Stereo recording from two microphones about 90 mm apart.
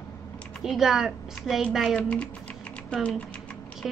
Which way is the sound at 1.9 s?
10° left (ahead or behind).